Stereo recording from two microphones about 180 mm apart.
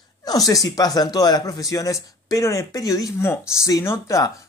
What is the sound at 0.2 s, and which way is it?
Speech, 20° left (ahead or behind).